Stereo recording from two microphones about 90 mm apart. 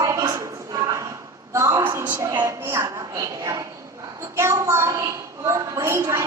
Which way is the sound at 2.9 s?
40° right (ahead or behind).